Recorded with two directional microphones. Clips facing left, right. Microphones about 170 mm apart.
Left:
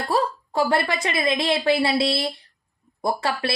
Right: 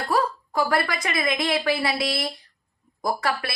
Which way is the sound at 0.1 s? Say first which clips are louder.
Left 1 dB; 25° left (ahead or behind).